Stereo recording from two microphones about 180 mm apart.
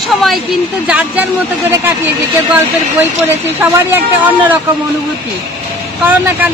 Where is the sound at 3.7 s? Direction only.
10° right (ahead or behind).